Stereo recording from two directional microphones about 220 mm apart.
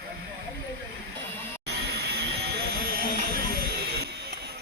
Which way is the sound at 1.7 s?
50° right (ahead or behind).